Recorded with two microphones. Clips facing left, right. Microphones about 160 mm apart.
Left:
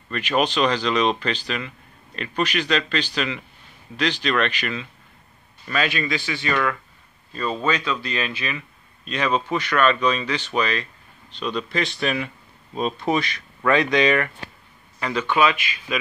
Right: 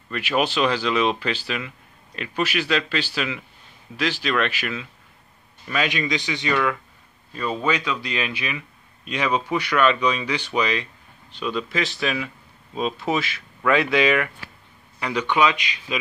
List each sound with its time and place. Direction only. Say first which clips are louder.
0.1 s a man's voice: left 1 dB; 10° right (ahead or behind)